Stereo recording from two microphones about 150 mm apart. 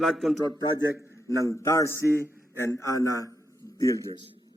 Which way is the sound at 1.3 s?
20° left (ahead or behind).